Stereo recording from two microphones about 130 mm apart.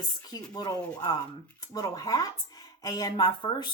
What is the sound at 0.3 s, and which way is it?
Speech, 30° left (ahead or behind).